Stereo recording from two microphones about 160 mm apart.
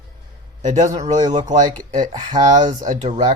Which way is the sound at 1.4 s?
50° right (ahead or behind).